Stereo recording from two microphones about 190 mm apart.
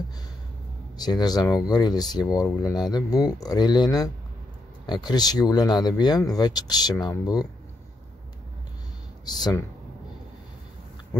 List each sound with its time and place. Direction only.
0.9 s speech: 20° left (ahead or behind)
9.2 s speech: 20° left (ahead or behind)